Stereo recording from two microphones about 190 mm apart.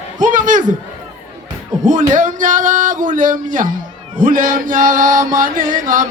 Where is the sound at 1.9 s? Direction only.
40° right (ahead or behind).